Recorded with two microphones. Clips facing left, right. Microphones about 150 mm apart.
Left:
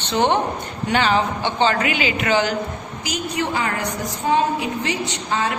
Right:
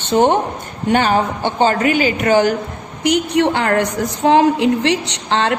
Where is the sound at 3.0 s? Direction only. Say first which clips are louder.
Right 10 dB; 70° right (ahead or behind).